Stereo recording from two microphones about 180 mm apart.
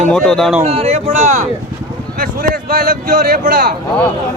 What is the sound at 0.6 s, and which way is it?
Speech, 35° right (ahead or behind).